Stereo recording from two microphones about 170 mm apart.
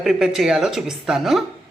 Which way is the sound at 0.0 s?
Centre (ahead or behind).